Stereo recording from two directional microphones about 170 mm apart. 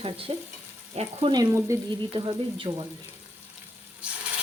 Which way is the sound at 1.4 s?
15° right (ahead or behind).